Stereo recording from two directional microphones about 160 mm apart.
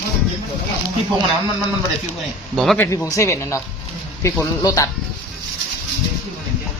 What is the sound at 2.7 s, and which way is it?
Speech, 20° left (ahead or behind).